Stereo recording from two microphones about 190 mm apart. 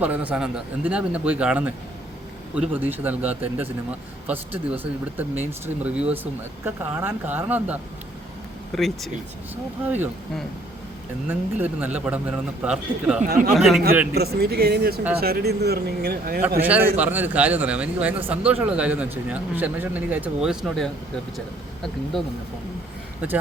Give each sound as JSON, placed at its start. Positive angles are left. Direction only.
{"t": 0.0, "sound": "a man's voice", "side_deg": -10}
{"t": 8.7, "sound": "speech", "side_deg": 0}
{"t": 9.8, "sound": "a man's voice", "side_deg": -10}
{"t": 11.3, "sound": "a man's voice", "side_deg": -10}
{"t": 13.2, "sound": "speech", "side_deg": -50}
{"t": 13.5, "sound": "speech", "side_deg": 0}
{"t": 14.1, "sound": "speech", "side_deg": -55}
{"t": 16.6, "sound": "a man's voice", "side_deg": -10}
{"t": 23.2, "sound": "a man's voice", "side_deg": -10}